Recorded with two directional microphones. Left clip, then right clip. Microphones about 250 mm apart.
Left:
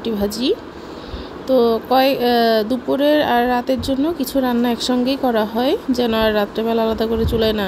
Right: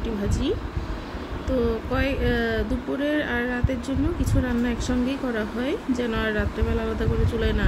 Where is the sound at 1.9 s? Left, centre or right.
Centre.